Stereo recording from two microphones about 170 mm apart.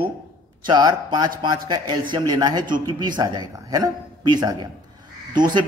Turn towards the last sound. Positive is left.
turn(degrees=-25)  # may be behind; listen again after turning